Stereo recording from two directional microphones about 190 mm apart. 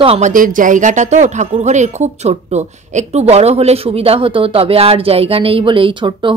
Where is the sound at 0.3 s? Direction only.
45° right (ahead or behind).